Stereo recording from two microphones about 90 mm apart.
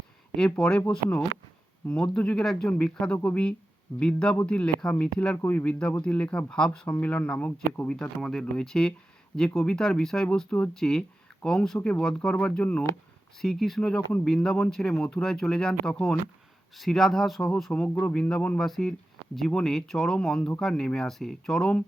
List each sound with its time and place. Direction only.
0.3 s speech: 10° left (ahead or behind)
17.7 s speech: 15° left (ahead or behind)